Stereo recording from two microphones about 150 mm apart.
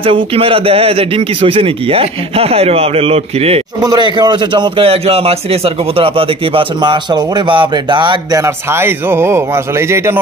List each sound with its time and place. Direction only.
0.0 s a man's voice: 35° right (ahead or behind)
3.8 s a man's voice: 25° right (ahead or behind)
8.4 s speech: 15° right (ahead or behind)